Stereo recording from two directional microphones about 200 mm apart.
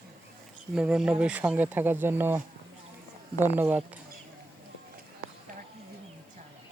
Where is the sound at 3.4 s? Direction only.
10° right (ahead or behind).